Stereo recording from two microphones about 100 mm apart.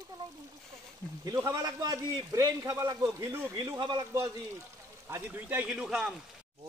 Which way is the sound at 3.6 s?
50° right (ahead or behind).